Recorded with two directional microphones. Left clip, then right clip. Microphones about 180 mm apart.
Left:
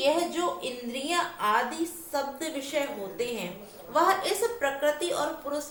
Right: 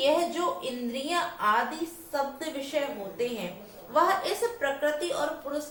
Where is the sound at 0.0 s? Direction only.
20° left (ahead or behind).